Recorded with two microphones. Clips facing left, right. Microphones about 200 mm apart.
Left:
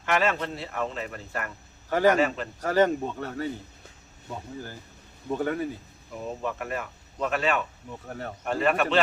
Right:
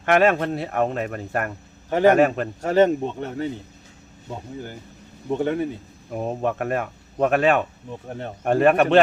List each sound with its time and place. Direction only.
0.0 s speech: 55° right (ahead or behind)
2.6 s speech: 25° right (ahead or behind)
6.1 s speech: 60° right (ahead or behind)
7.9 s speech: 20° right (ahead or behind)
8.4 s speech: 55° right (ahead or behind)